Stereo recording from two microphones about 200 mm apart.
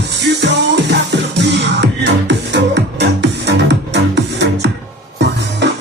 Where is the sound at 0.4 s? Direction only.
60° right (ahead or behind).